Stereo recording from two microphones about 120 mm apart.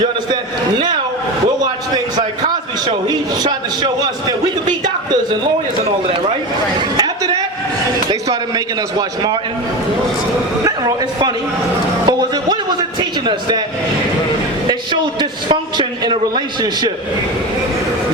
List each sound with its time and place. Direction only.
2.8 s a man's voice: 35° right (ahead or behind)
6.9 s a sound: 35° right (ahead or behind)
8.3 s a man's voice: 35° right (ahead or behind)
10.7 s a man's voice: 30° right (ahead or behind)
13.0 s a sound: 40° right (ahead or behind)
15.2 s a man's voice: 40° right (ahead or behind)